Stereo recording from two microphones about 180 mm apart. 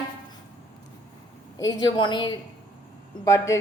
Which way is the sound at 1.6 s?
20° left (ahead or behind).